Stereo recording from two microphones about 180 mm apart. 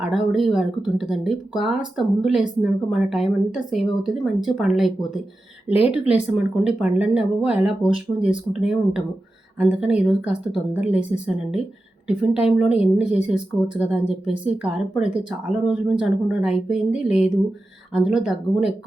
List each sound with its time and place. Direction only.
0.0 s speech: 5° right (ahead or behind)